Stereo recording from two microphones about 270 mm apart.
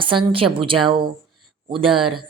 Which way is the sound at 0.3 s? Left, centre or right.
Centre.